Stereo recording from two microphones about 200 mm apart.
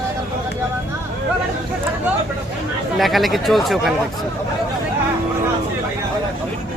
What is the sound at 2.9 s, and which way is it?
Speech, centre (ahead or behind).